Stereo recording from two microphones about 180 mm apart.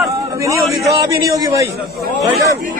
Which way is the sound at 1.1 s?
20° right (ahead or behind).